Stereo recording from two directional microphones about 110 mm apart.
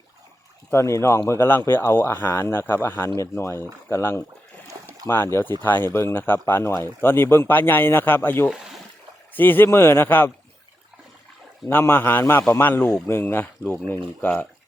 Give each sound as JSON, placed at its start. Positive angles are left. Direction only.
{"t": 0.7, "sound": "speech", "side_deg": 25}
{"t": 4.7, "sound": "a sound", "side_deg": -30}
{"t": 5.0, "sound": "speech", "side_deg": 20}
{"t": 11.7, "sound": "speech", "side_deg": 20}